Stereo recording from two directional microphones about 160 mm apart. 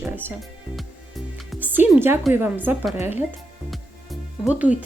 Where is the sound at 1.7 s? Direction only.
15° right (ahead or behind).